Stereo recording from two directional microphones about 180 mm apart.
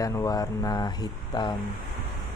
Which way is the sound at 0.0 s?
20° left (ahead or behind).